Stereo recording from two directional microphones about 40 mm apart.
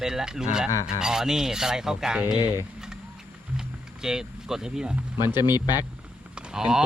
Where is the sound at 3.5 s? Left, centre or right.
Centre.